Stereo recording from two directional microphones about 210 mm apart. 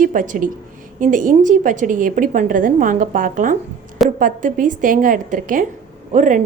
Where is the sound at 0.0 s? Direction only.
40° right (ahead or behind).